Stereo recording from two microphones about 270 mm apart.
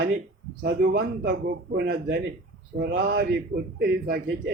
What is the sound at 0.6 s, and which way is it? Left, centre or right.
A man's voice, right.